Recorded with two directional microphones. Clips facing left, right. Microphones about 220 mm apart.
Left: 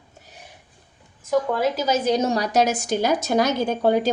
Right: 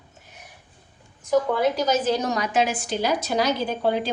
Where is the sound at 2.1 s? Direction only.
25° left (ahead or behind).